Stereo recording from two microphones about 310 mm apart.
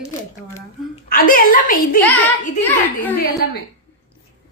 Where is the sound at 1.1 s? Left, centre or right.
Left.